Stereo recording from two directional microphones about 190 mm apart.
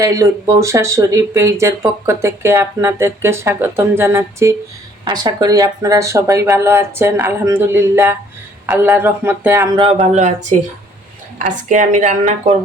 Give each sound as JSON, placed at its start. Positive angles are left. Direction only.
{"t": 0.0, "sound": "speech", "side_deg": -15}
{"t": 10.5, "sound": "speech", "side_deg": -40}